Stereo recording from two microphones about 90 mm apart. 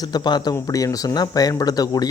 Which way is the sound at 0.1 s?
50° left (ahead or behind).